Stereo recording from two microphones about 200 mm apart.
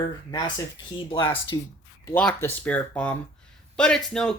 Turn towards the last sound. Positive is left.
turn(degrees=5)  # may be behind; listen again after turning